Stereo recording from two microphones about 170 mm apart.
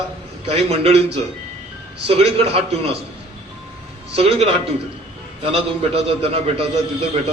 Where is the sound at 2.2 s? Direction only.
35° right (ahead or behind).